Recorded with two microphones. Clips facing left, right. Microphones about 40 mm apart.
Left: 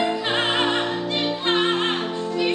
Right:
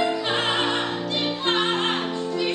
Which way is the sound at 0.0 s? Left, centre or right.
Centre.